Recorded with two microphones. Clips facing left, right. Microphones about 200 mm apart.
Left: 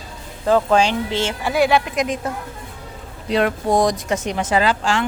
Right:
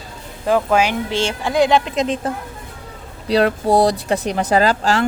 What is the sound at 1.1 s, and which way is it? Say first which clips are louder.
Speech: right 2 dB; 20° left (ahead or behind).